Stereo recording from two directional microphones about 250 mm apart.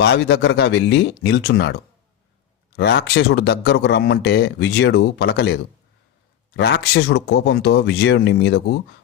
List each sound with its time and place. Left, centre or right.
0.0 s speech: left